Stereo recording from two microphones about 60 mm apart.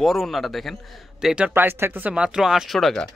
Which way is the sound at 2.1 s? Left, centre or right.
Centre.